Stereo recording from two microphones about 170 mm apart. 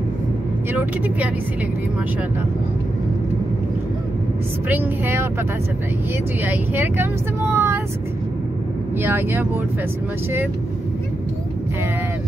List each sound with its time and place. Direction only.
0.7 s speech: 10° right (ahead or behind)
4.6 s speech: 10° right (ahead or behind)
6.4 s speech: 10° right (ahead or behind)
9.0 s speech: 10° right (ahead or behind)